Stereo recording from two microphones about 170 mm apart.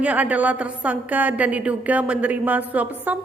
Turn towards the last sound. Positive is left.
turn(degrees=-10)  # may be behind; listen again after turning